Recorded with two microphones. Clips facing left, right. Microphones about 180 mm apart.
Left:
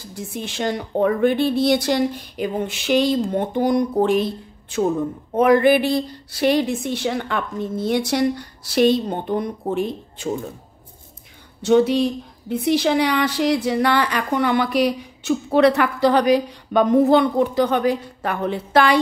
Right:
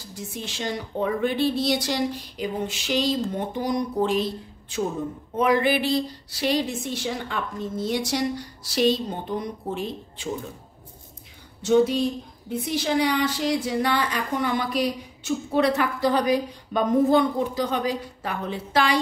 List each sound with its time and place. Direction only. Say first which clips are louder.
0.3 s speech: left 6 dB; 55° left (ahead or behind)
11.6 s a woman's voice: left 4 dB; 70° left (ahead or behind)